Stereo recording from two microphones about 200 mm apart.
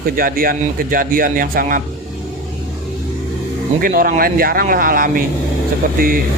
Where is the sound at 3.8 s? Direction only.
45° right (ahead or behind).